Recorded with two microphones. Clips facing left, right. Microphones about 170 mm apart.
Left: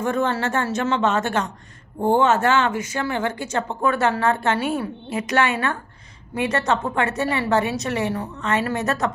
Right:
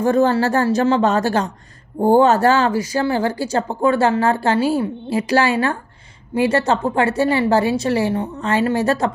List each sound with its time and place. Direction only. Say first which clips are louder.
0.0 s speech: right 7 dB; 35° right (ahead or behind)